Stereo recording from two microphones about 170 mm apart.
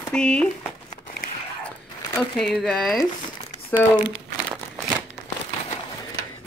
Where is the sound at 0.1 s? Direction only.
5° left (ahead or behind).